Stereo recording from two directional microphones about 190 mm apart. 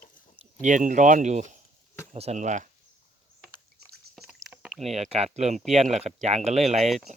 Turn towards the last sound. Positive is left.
turn(degrees=-35)  # may be behind; listen again after turning